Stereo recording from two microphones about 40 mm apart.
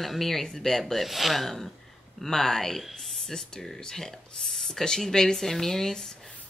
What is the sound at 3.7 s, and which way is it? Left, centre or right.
Speech, centre.